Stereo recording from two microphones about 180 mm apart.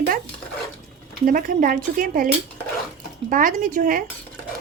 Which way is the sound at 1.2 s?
50° right (ahead or behind).